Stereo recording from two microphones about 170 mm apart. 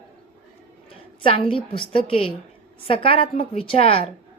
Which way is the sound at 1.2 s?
30° left (ahead or behind).